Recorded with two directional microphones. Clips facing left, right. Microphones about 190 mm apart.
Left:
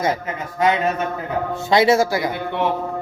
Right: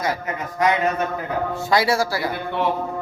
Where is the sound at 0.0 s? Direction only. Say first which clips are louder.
Left 3 dB; 25° left (ahead or behind).